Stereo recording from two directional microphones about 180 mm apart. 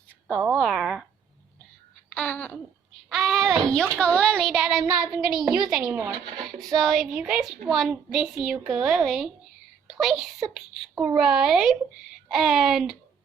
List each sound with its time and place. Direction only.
0.5 s a child's voice: centre (ahead or behind)
2.0 s babbling: 5° left (ahead or behind)
3.1 s a child's voice: centre (ahead or behind)
6.1 s speech: 55° right (ahead or behind)
6.4 s a child's voice: centre (ahead or behind)